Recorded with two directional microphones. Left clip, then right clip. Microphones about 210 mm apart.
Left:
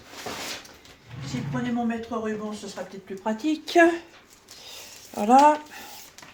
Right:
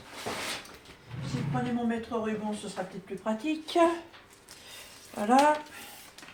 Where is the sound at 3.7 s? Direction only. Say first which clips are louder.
Left 6 dB; 40° left (ahead or behind).